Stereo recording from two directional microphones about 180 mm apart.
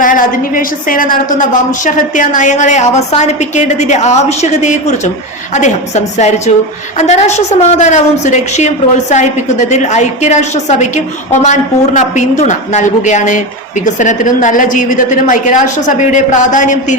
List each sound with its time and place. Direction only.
0.0 s a woman's voice: 50° left (ahead or behind)